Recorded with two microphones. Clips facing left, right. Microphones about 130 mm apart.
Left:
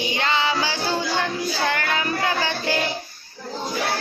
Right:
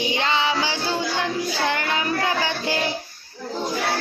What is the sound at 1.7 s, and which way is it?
Child singing, 25° right (ahead or behind).